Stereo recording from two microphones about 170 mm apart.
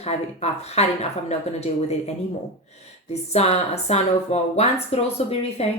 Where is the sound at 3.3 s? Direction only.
40° left (ahead or behind).